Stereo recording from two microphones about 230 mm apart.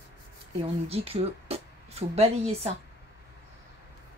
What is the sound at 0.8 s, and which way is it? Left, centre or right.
A woman's voice, right.